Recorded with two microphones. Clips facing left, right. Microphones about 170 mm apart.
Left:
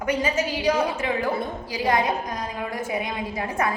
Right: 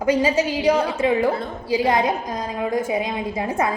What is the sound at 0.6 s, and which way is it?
A woman's voice, 30° right (ahead or behind).